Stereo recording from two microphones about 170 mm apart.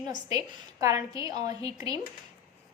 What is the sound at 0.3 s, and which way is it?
A woman's voice, 20° right (ahead or behind).